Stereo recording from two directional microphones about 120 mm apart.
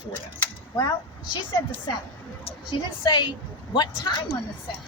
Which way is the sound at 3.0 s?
40° left (ahead or behind).